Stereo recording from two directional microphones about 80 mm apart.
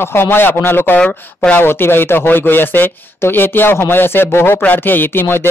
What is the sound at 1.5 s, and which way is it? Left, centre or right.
A man's voice, left.